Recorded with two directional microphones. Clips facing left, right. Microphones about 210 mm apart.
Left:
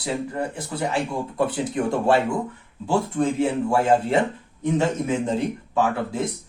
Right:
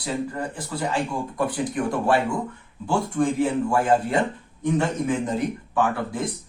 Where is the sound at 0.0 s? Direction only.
25° left (ahead or behind).